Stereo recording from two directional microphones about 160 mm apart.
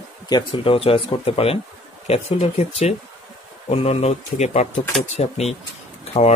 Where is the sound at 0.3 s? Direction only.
30° left (ahead or behind).